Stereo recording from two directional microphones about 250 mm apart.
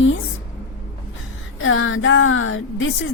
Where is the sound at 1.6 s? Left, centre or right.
Left.